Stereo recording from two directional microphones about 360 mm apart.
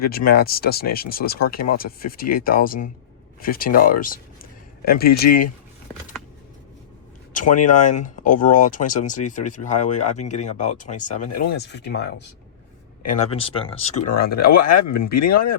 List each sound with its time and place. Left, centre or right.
0.0 s speech: left
7.3 s speech: left
14.5 s speech: left
14.9 s speech: left
15.2 s speech: left